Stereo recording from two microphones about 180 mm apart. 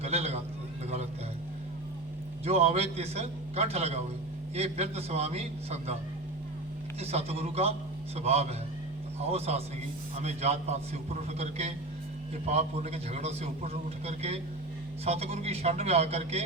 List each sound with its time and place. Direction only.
0.0 s a sound: 35° right (ahead or behind)
2.4 s a man's voice: 35° right (ahead or behind)
7.0 s a man's voice: 35° right (ahead or behind)